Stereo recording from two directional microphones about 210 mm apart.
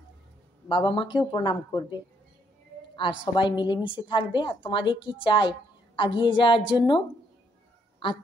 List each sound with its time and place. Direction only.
0.7 s a woman's voice: 25° left (ahead or behind)
3.0 s a woman's voice: 25° left (ahead or behind)